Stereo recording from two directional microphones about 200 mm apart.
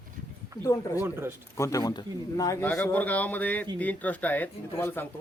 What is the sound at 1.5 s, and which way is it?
Speech, 15° left (ahead or behind).